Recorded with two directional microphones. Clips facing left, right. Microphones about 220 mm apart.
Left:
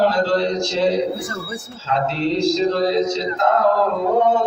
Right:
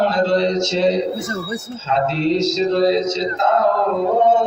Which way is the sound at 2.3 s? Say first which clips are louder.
Left 1 dB; 20° right (ahead or behind).